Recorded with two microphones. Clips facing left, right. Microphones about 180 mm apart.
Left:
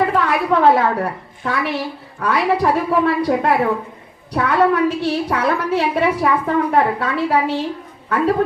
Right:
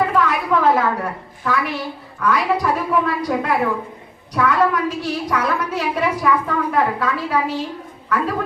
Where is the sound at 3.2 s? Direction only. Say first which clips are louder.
Left 3 dB; 30° left (ahead or behind).